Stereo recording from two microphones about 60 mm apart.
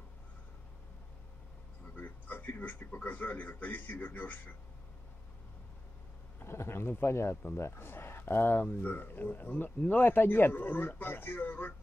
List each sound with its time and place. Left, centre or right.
2.0 s a man's voice: left
6.4 s speech: left